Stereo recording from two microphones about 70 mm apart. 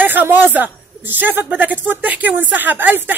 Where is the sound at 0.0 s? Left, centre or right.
Right.